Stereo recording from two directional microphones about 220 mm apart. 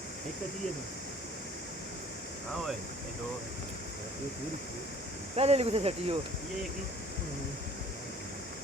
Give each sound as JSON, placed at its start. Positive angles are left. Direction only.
{"t": 5.4, "sound": "speech", "side_deg": -30}